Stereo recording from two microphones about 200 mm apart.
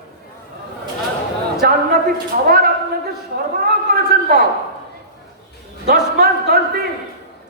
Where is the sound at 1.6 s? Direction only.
50° right (ahead or behind).